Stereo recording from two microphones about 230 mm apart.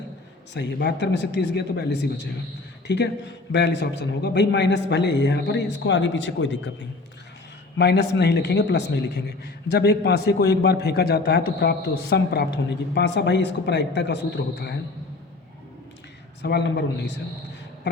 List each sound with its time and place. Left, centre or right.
0.5 s a man's voice: left
16.4 s a man's voice: left